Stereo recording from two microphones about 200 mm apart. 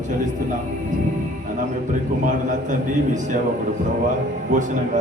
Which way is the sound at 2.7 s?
40° right (ahead or behind).